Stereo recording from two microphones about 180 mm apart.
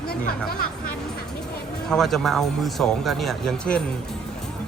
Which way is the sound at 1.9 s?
Centre (ahead or behind).